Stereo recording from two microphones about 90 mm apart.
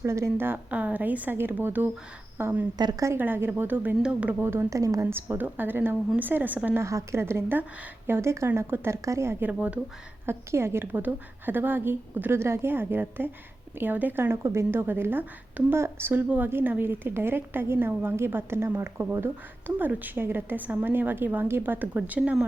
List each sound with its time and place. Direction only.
0.0 s a woman's voice: 30° right (ahead or behind)
2.7 s a woman's voice: 50° right (ahead or behind)
3.2 s a woman's voice: 25° right (ahead or behind)
4.4 s a woman's voice: 30° right (ahead or behind)
5.0 s a woman's voice: 25° right (ahead or behind)
6.8 s a woman's voice: 30° right (ahead or behind); by 9.8 s 15° right (ahead or behind)
10.2 s a woman's voice: 30° right (ahead or behind)